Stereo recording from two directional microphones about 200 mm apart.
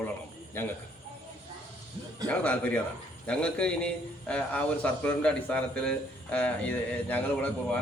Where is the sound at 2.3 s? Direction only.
5° left (ahead or behind).